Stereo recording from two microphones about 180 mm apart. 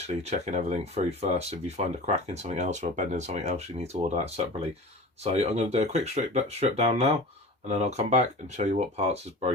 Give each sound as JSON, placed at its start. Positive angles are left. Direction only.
{"t": 0.2, "sound": "speech", "side_deg": -40}